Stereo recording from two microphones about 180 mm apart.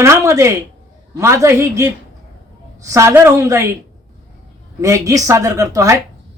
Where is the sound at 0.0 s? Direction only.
15° right (ahead or behind).